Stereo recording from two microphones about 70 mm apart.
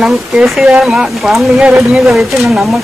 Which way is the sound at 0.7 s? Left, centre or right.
Centre.